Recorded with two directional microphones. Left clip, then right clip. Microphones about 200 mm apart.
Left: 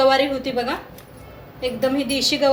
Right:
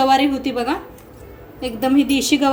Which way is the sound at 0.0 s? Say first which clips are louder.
Right 1 dB; 40° right (ahead or behind).